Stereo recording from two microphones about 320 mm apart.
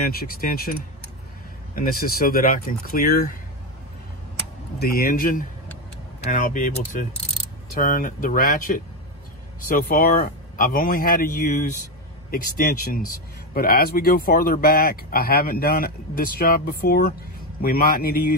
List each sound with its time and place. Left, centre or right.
0.0 s speech: left
1.8 s speech: left
4.7 s speech: left